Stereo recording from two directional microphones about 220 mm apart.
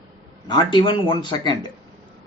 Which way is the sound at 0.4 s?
20° left (ahead or behind).